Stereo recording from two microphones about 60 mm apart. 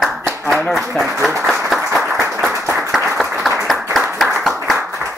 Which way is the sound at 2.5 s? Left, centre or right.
Right.